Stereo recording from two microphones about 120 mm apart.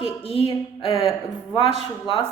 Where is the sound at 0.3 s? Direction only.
50° left (ahead or behind).